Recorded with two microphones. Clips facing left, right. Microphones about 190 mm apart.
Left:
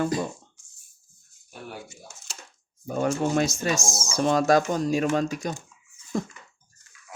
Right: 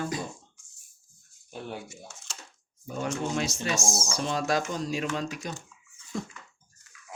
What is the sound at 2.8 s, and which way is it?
Speech, 45° left (ahead or behind).